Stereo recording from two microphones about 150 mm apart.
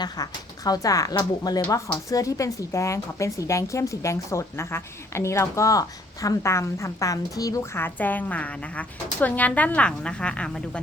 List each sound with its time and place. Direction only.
0.0 s a woman's voice: 25° left (ahead or behind); by 10.8 s 5° left (ahead or behind)